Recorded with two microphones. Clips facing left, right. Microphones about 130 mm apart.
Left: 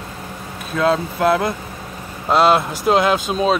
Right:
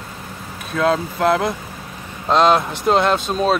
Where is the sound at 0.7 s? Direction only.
Centre (ahead or behind).